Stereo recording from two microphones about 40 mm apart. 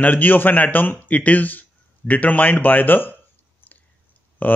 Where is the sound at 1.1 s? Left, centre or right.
Left.